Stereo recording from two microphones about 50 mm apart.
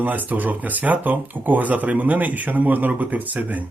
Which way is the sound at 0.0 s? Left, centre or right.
Right.